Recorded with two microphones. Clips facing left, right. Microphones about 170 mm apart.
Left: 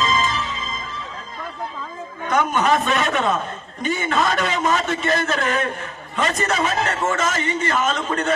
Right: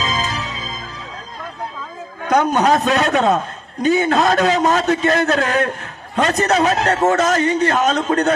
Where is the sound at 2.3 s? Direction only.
40° right (ahead or behind).